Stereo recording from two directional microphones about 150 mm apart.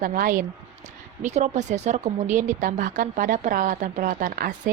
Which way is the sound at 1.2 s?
50° right (ahead or behind).